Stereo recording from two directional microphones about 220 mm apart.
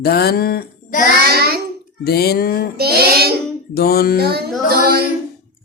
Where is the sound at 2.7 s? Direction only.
45° right (ahead or behind).